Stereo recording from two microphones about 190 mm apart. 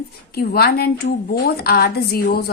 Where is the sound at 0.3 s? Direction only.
55° left (ahead or behind).